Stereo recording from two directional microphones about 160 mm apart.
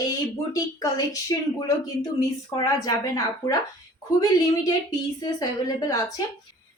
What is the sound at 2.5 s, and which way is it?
A woman's voice, 20° left (ahead or behind).